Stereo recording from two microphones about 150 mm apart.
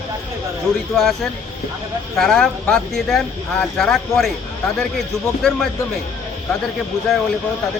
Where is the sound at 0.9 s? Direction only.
Centre (ahead or behind).